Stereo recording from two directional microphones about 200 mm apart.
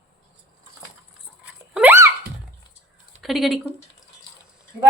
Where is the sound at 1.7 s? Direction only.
10° right (ahead or behind).